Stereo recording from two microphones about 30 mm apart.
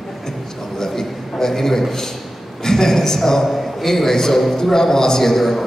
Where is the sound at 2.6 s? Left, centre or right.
Centre.